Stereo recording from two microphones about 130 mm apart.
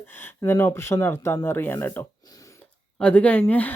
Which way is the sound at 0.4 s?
20° left (ahead or behind).